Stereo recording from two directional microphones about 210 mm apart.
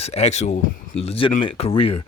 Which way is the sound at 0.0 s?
30° left (ahead or behind).